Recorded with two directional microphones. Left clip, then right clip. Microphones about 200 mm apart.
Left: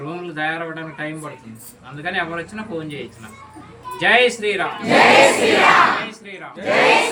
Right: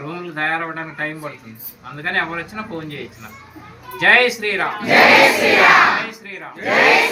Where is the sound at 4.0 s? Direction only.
15° left (ahead or behind).